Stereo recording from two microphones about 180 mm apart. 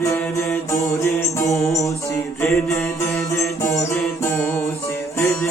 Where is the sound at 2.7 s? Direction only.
15° left (ahead or behind).